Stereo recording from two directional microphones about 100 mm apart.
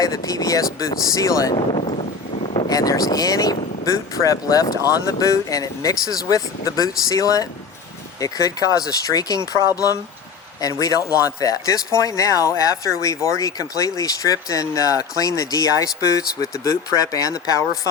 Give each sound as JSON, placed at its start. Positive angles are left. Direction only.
{"t": 0.0, "sound": "a man's voice", "side_deg": 35}
{"t": 2.6, "sound": "a man's voice", "side_deg": 40}